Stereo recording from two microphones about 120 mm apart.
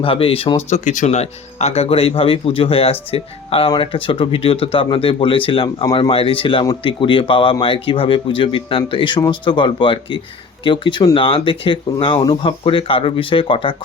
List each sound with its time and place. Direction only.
0.0 s speech: 50° left (ahead or behind)